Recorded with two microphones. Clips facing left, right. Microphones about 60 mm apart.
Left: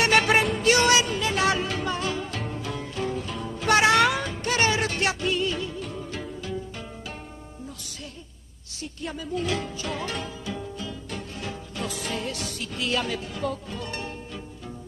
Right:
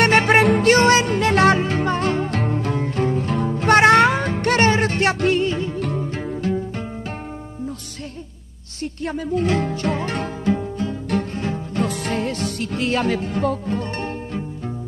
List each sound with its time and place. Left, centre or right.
0.3 s music: right
0.7 s music: right
1.6 s music: right
4.3 s music: right
8.8 s music: right
10.5 s music: right